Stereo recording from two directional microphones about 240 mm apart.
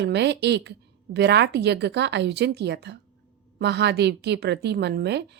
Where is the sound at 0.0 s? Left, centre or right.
Right.